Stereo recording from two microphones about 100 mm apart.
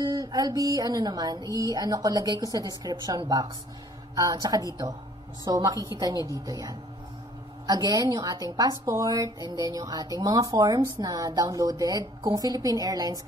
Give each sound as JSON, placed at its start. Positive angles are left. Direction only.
{"t": 0.0, "sound": "a woman's voice", "side_deg": -40}